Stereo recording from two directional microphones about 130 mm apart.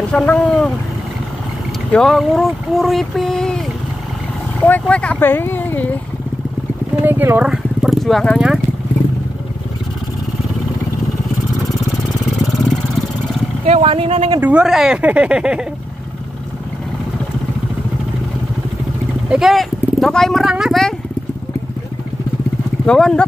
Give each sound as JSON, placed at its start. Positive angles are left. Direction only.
{"t": 0.1, "sound": "speech", "side_deg": 10}
{"t": 1.9, "sound": "speech", "side_deg": 5}
{"t": 4.6, "sound": "speech", "side_deg": 10}
{"t": 7.0, "sound": "horse", "side_deg": -15}
{"t": 7.5, "sound": "a sound", "side_deg": -5}
{"t": 13.7, "sound": "speech", "side_deg": -50}
{"t": 14.4, "sound": "speech", "side_deg": -10}
{"t": 19.2, "sound": "speech", "side_deg": -5}
{"t": 22.8, "sound": "speech", "side_deg": 5}